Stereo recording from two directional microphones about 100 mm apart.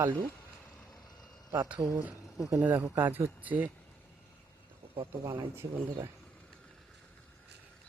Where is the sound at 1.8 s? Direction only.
45° right (ahead or behind).